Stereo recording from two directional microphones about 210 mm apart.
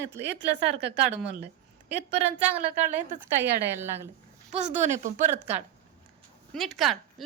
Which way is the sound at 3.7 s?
10° right (ahead or behind).